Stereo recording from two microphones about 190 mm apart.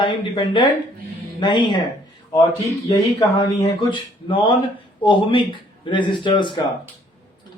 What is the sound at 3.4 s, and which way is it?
Speech, 25° left (ahead or behind).